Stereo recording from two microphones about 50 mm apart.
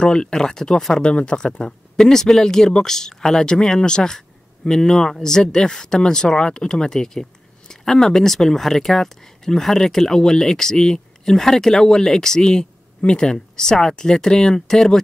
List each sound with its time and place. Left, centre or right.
0.0 s speech: centre